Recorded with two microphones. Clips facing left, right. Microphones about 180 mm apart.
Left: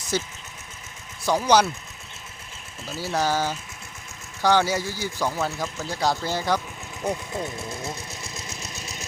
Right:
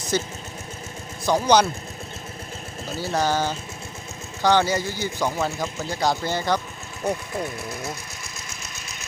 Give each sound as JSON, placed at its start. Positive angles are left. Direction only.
{"t": 0.1, "sound": "speech", "side_deg": 5}
{"t": 1.3, "sound": "speech", "side_deg": 5}
{"t": 3.0, "sound": "speech", "side_deg": 5}
{"t": 7.0, "sound": "speech", "side_deg": 20}